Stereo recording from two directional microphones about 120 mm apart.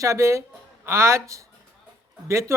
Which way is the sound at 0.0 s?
25° right (ahead or behind).